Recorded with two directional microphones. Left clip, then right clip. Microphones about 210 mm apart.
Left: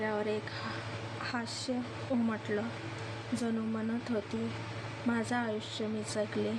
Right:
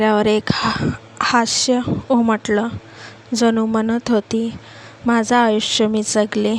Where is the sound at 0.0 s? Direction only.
50° right (ahead or behind).